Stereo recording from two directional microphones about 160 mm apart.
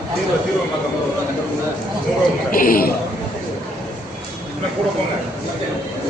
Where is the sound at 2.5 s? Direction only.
65° left (ahead or behind).